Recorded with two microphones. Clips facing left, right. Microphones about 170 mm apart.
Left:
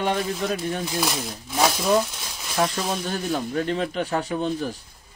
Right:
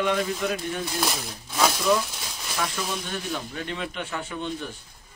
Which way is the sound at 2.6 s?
35° left (ahead or behind).